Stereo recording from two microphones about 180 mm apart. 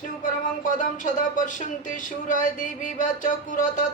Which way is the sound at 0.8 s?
45° left (ahead or behind).